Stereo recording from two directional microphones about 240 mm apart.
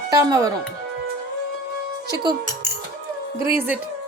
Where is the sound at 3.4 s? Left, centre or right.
Centre.